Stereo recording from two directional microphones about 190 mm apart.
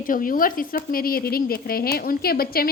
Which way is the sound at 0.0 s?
45° left (ahead or behind).